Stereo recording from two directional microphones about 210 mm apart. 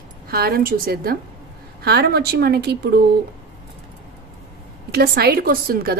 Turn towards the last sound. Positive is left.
turn(degrees=-45)  # may be behind; listen again after turning